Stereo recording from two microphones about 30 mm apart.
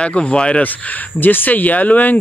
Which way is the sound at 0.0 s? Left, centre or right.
Left.